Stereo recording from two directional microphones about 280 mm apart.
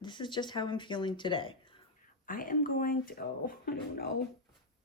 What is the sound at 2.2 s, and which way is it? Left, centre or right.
Speech, left.